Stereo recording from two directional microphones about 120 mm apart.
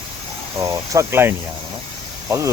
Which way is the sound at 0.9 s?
20° right (ahead or behind).